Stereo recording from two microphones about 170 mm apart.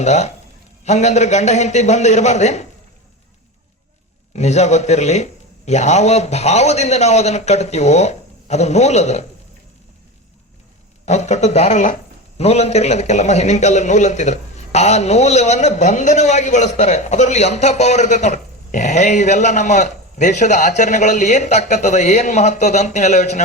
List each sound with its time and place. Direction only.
0.0 s a man's voice: 40° left (ahead or behind)
4.4 s a man's voice: 40° left (ahead or behind)
11.0 s a man's voice: 40° left (ahead or behind)